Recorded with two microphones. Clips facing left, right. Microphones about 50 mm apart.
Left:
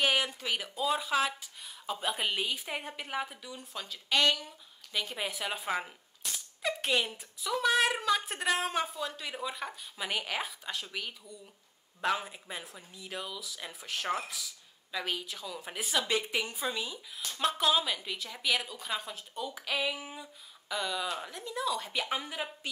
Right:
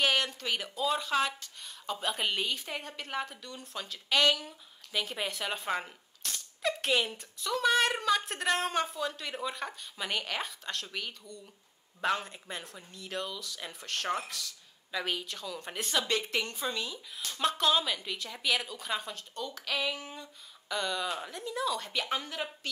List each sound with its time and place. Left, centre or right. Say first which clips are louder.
0.0 s speech: even; centre